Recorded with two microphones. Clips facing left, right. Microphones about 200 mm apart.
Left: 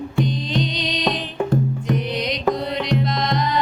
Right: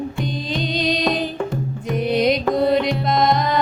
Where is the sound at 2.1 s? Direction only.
50° right (ahead or behind).